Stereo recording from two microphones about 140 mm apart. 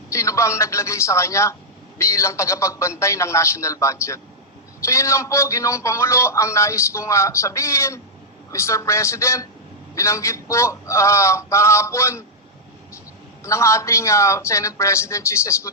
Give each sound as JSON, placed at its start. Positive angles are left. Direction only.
{"t": 0.1, "sound": "a man's voice", "side_deg": 20}
{"t": 13.4, "sound": "a man's voice", "side_deg": 20}